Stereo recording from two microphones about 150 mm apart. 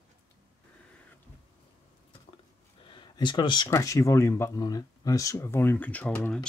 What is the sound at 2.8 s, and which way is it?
Speech, 30° left (ahead or behind).